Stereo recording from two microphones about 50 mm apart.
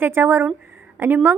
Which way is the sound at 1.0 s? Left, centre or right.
Right.